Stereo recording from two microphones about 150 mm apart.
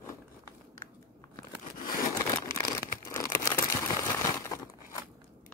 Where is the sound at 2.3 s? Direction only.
20° left (ahead or behind).